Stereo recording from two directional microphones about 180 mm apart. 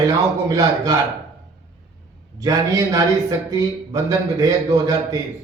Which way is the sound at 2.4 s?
20° right (ahead or behind).